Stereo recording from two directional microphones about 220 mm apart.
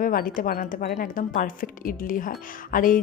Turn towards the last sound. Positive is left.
turn(degrees=40)  # may be behind; listen again after turning